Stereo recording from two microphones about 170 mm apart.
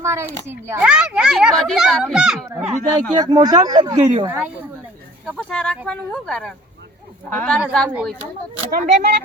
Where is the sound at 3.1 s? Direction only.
25° right (ahead or behind).